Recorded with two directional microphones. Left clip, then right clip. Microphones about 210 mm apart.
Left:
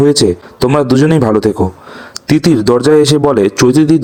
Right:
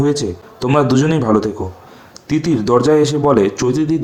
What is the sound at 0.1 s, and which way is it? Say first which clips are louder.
A man's voice: left 9 dB; 35° left (ahead or behind).